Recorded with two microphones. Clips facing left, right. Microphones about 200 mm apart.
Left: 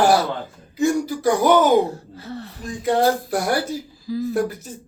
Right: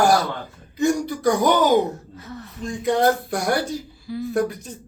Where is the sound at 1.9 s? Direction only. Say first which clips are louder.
Left 1 dB; 30° left (ahead or behind).